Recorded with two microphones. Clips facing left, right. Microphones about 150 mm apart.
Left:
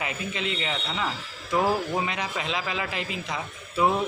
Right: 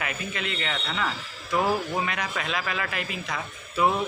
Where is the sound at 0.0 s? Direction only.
20° left (ahead or behind).